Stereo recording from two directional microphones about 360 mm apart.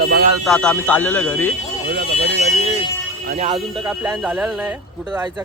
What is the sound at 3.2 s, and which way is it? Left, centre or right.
Speech, centre.